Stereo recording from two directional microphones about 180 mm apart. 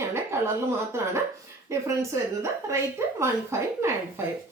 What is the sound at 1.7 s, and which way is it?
A woman's voice, 15° right (ahead or behind).